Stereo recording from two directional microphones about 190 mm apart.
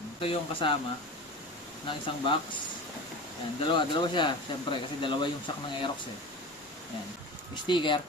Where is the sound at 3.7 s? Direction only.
25° left (ahead or behind).